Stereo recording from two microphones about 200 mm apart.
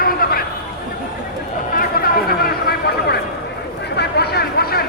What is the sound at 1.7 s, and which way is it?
Chatter, 50° left (ahead or behind).